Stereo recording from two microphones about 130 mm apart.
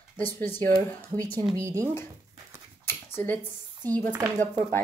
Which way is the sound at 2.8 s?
15° left (ahead or behind).